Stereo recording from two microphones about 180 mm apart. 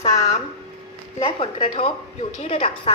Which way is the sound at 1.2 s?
35° left (ahead or behind).